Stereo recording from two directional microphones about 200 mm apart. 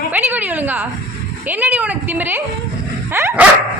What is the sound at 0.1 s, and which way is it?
A woman's voice, 10° right (ahead or behind).